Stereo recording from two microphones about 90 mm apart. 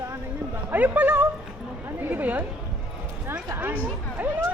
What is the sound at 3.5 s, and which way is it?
Speech, 20° right (ahead or behind).